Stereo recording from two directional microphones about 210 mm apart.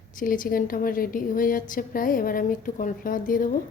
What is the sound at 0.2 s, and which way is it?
A woman's voice, 40° left (ahead or behind).